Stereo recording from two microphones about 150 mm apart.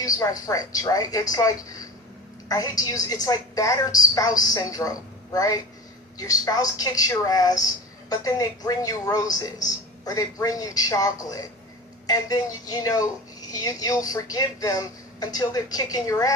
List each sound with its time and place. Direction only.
0.0 s a woman's voice: 20° left (ahead or behind)